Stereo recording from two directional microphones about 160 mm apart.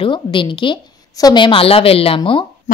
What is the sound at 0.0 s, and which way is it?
A woman's voice, 30° left (ahead or behind).